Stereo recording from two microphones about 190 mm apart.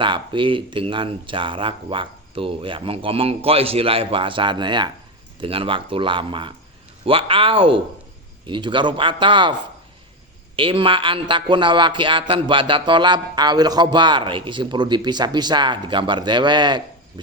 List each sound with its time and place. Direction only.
0.0 s a man's voice: 25° right (ahead or behind)